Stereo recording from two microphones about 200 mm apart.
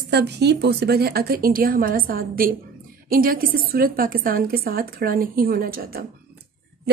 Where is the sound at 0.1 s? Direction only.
55° right (ahead or behind).